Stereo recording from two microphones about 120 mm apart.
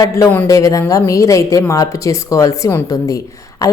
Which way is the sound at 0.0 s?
30° left (ahead or behind).